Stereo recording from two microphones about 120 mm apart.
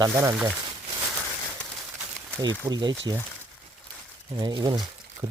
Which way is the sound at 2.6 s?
35° right (ahead or behind).